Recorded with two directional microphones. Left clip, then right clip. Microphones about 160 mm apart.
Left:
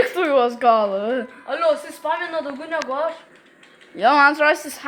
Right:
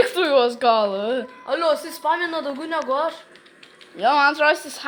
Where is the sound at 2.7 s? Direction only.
90° right.